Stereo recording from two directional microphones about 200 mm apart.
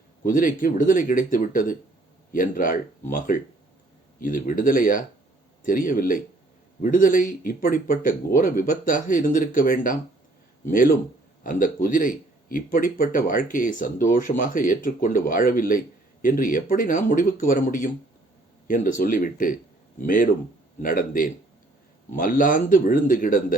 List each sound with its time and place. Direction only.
0.3 s speech: 45° left (ahead or behind)